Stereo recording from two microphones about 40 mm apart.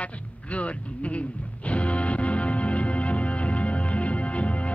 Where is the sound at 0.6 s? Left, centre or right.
Left.